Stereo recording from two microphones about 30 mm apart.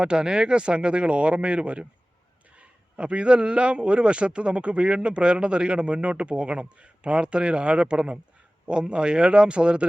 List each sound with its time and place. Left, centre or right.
0.0 s a man's voice: right